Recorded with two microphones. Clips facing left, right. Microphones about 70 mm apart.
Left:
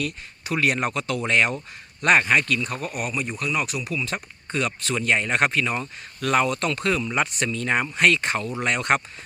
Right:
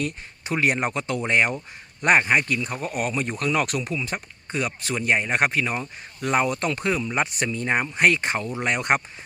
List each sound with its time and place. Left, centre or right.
0.0 s speech: right
2.8 s speech: right
3.8 s speech: right